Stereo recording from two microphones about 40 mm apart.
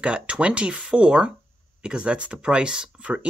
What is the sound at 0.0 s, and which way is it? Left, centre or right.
Speech, right.